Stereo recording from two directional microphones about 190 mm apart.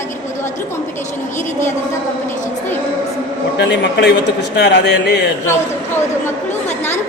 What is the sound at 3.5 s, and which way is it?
Speech, 60° left (ahead or behind).